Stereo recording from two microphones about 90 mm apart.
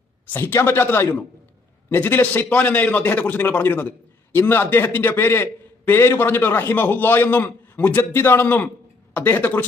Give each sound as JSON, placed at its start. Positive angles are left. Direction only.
{"t": 0.3, "sound": "a man's voice", "side_deg": 25}